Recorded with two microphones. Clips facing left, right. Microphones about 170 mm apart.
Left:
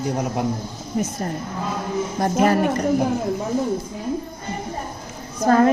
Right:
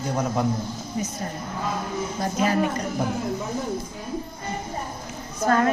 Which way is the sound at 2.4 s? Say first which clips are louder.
Left 4 dB; 55° left (ahead or behind).